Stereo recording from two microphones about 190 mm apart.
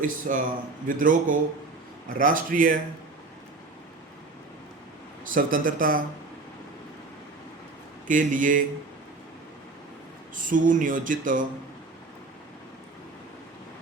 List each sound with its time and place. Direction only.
0.0 s speech: 45° right (ahead or behind)
5.2 s speech: 45° right (ahead or behind)
8.0 s speech: 45° right (ahead or behind)
10.3 s speech: 45° right (ahead or behind)